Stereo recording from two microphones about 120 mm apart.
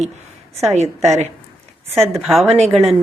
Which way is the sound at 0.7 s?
75° right (ahead or behind).